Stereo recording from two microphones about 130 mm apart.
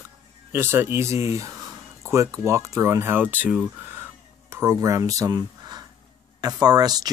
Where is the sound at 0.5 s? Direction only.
20° right (ahead or behind).